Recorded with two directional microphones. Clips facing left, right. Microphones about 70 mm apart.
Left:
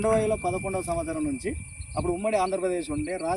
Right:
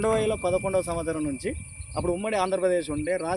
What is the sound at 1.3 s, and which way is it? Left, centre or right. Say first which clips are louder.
Speech: even; right.